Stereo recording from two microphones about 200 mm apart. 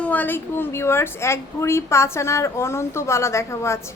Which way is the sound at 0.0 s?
10° left (ahead or behind).